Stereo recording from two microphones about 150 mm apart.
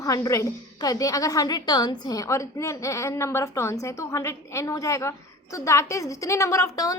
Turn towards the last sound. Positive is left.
turn(degrees=25)  # may be behind; listen again after turning